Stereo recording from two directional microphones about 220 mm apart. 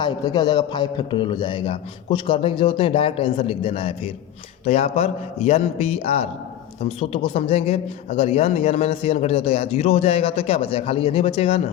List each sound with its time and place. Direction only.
0.0 s a man's voice: 20° left (ahead or behind)